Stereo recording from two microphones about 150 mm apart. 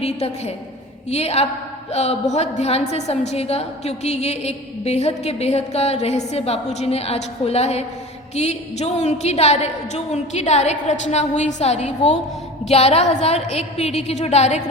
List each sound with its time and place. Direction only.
0.0 s a woman's voice: 45° left (ahead or behind)